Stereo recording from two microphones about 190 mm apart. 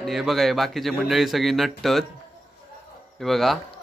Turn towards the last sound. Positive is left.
turn(degrees=0)  # may be behind; listen again after turning